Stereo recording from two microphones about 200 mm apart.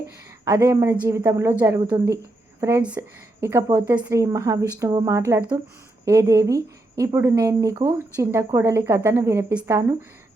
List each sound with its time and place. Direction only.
0.4 s speech: 15° right (ahead or behind)